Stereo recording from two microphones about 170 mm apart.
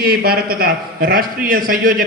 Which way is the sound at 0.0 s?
65° right (ahead or behind).